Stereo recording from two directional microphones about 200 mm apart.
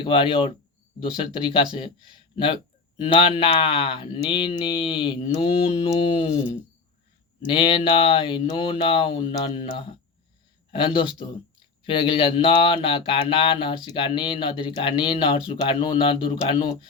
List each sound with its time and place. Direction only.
0.0 s speech: 25° left (ahead or behind)